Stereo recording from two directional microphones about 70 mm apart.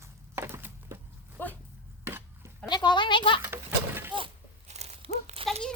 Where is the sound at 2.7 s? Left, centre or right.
Left.